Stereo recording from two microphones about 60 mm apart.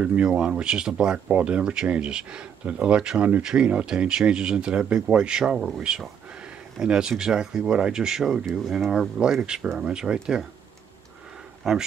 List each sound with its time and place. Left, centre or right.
0.0 s speech: centre
11.6 s speech: centre